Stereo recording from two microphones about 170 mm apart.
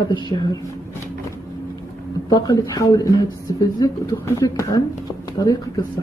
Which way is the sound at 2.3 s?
20° left (ahead or behind).